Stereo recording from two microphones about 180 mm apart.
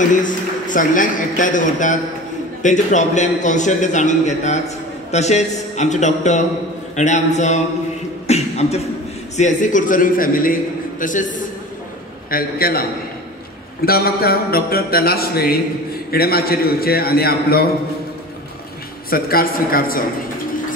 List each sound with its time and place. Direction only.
0.1 s a man's voice: 45° left (ahead or behind)
19.0 s a man's voice: 55° left (ahead or behind)